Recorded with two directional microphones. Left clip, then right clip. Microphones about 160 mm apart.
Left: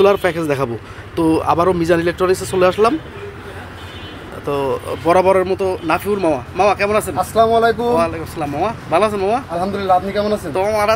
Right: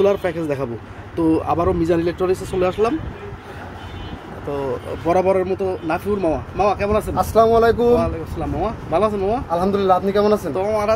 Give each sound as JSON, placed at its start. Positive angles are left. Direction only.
{"t": 0.0, "sound": "a man's voice", "side_deg": 5}
{"t": 4.5, "sound": "speech", "side_deg": 5}
{"t": 7.2, "sound": "speech", "side_deg": -35}
{"t": 8.0, "sound": "speech", "side_deg": 0}
{"t": 9.6, "sound": "speech", "side_deg": -40}
{"t": 10.5, "sound": "speech", "side_deg": -5}